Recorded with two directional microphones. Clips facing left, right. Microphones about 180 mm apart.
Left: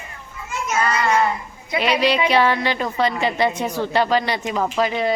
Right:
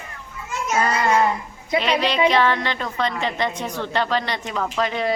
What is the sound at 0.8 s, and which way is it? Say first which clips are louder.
Speech: even; 35° right (ahead or behind).